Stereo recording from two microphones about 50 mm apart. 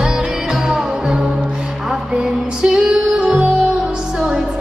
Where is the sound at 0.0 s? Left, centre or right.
Centre.